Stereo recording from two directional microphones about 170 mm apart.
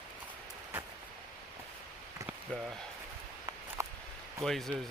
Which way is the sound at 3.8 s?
15° right (ahead or behind).